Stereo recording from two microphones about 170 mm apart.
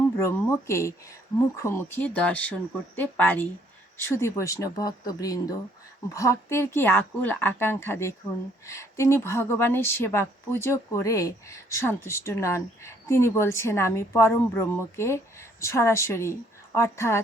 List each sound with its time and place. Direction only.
0.2 s a woman's voice: 15° left (ahead or behind)